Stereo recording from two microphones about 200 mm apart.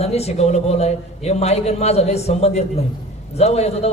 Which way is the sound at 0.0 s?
30° left (ahead or behind).